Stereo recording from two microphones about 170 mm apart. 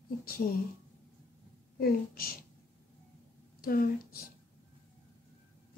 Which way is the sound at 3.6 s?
60° left (ahead or behind).